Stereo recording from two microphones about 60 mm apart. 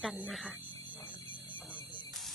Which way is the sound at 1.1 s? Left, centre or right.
Left.